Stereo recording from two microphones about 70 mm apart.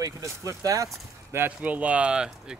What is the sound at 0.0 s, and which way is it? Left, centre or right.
Speech, right.